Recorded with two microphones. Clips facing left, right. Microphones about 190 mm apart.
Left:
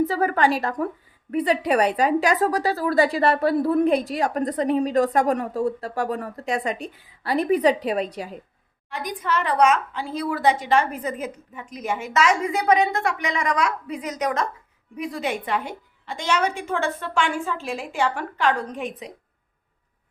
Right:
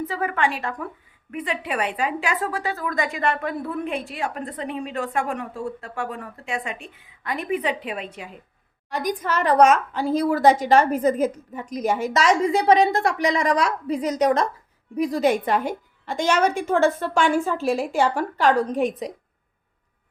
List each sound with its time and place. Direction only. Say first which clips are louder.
0.0 s a woman's voice: left 4 dB; 35° left (ahead or behind)
8.9 s a woman's voice: right 2 dB; 45° right (ahead or behind)